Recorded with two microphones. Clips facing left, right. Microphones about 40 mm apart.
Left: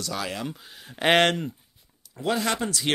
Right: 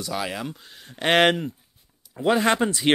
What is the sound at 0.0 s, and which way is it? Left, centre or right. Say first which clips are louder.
Speech: right 2 dB; centre.